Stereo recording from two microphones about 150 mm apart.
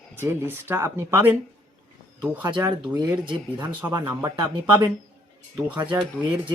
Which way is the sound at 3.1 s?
10° right (ahead or behind).